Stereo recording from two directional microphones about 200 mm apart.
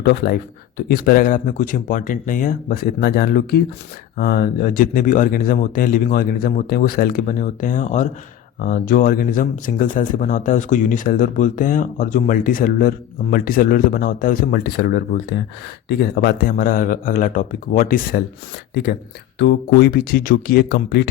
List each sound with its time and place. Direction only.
0.0 s speech: 50° left (ahead or behind); by 8.1 s 35° left (ahead or behind)
8.5 s speech: 45° left (ahead or behind)
18.7 s speech: 55° left (ahead or behind)